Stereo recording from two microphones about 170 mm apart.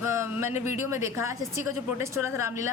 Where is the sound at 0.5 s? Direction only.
45° left (ahead or behind).